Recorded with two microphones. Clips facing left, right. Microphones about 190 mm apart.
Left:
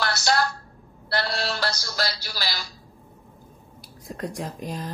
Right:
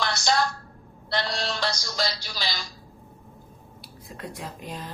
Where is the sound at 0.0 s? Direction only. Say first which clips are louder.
Left 1 dB; 5° left (ahead or behind).